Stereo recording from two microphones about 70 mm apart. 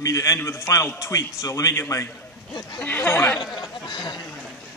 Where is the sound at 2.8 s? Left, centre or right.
Left.